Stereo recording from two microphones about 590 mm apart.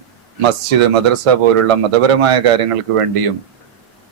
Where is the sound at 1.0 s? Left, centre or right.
Right.